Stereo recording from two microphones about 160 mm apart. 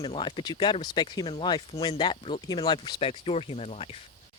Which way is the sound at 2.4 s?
25° left (ahead or behind).